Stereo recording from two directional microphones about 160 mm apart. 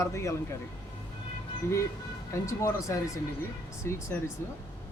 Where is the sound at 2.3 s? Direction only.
20° left (ahead or behind).